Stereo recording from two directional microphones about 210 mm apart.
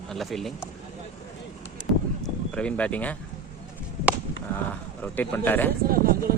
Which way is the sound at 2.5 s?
5° left (ahead or behind).